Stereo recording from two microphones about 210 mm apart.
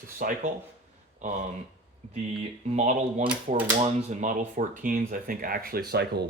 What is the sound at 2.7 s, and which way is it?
Speech, 35° right (ahead or behind).